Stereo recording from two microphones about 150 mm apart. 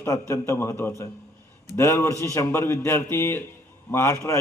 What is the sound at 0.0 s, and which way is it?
A man's voice, 20° left (ahead or behind).